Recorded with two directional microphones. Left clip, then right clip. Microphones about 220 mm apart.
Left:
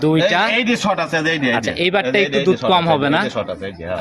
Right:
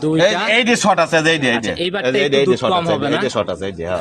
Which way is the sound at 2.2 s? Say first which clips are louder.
Right 3 dB; 50° right (ahead or behind).